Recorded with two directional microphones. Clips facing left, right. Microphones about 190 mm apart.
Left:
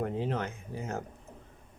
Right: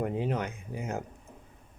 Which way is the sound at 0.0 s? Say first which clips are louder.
Right 1 dB; 15° right (ahead or behind).